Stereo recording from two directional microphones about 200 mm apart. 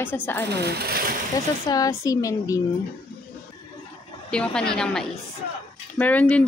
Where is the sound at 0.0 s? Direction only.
10° left (ahead or behind).